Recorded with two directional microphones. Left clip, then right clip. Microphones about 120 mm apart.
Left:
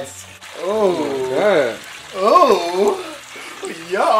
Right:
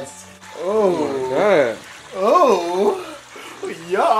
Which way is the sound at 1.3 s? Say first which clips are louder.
Even; 10° right (ahead or behind).